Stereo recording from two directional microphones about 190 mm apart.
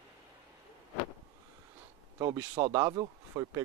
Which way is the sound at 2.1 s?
20° right (ahead or behind).